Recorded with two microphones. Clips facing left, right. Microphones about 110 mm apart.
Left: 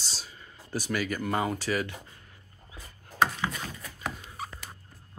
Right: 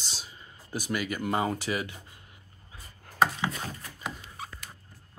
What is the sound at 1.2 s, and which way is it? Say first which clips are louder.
Speech: right 1 dB; 20° right (ahead or behind).